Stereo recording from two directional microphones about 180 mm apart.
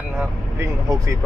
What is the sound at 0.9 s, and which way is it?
Speech, 20° right (ahead or behind).